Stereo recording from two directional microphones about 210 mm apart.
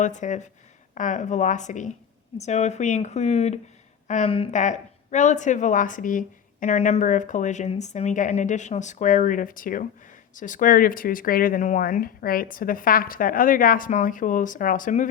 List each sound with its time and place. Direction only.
0.0 s a woman's voice: 35° left (ahead or behind)